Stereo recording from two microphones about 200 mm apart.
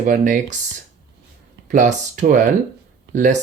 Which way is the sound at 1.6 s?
40° right (ahead or behind).